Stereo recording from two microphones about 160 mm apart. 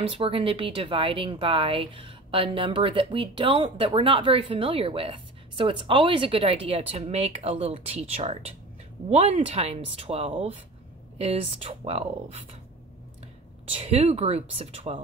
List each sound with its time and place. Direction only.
0.1 s speech: 35° right (ahead or behind)
13.7 s speech: 40° right (ahead or behind)